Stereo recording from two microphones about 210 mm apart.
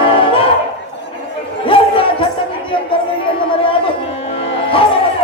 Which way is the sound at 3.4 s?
25° left (ahead or behind).